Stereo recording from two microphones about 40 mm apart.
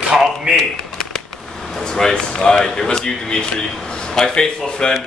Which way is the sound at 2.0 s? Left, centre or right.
Centre.